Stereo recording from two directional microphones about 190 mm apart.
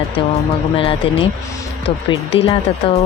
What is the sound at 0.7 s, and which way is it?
A woman's voice, 30° left (ahead or behind).